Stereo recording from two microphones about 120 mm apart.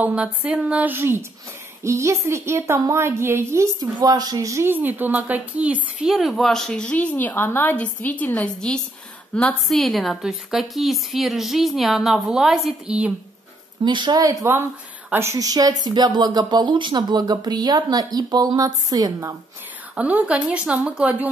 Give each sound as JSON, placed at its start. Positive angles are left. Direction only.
{"t": 0.0, "sound": "a woman's voice", "side_deg": -10}
{"t": 3.8, "sound": "a woman's voice", "side_deg": -35}
{"t": 13.8, "sound": "a woman's voice", "side_deg": -40}
{"t": 20.0, "sound": "speech", "side_deg": -10}